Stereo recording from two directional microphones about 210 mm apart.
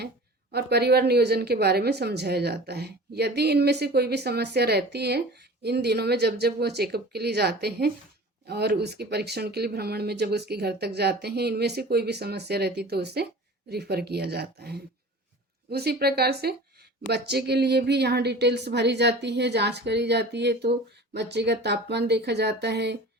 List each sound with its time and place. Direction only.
0.5 s speech: 50° right (ahead or behind)